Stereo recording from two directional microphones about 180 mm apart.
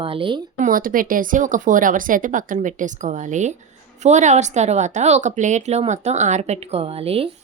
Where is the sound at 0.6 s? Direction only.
50° right (ahead or behind).